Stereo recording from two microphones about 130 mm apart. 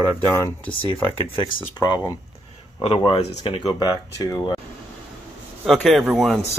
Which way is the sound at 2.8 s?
45° left (ahead or behind).